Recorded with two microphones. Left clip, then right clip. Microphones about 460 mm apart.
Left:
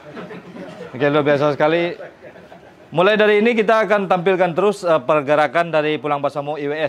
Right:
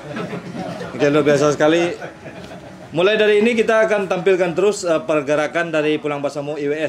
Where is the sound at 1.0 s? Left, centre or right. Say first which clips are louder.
Right 1 dB; centre.